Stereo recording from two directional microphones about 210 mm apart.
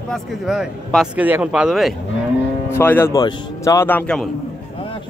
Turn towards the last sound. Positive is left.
turn(degrees=5)  # may be behind; listen again after turning